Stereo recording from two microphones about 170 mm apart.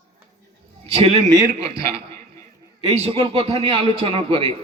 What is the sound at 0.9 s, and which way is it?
Speech, 35° right (ahead or behind).